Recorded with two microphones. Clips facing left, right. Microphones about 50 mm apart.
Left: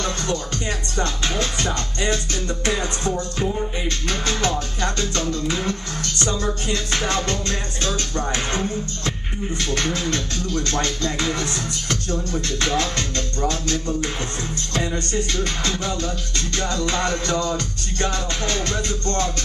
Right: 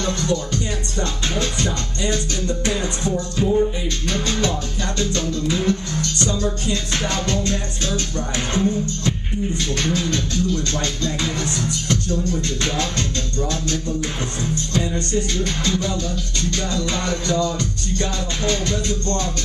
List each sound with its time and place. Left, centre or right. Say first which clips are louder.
0.0 s music: right 3 dB; left
15.4 s music: right 2 dB; left